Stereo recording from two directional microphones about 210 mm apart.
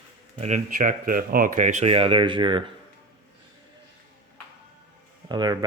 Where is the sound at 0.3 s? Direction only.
35° right (ahead or behind).